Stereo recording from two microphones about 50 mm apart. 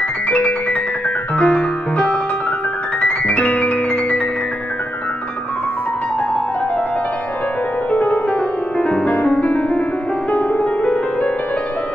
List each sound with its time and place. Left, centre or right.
0.3 s music: left
7.9 s music: left
8.7 s music: left